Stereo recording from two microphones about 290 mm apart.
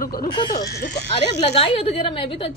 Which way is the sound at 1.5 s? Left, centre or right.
Centre.